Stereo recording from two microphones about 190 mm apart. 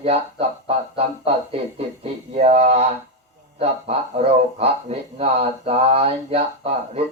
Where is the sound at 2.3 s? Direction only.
35° right (ahead or behind).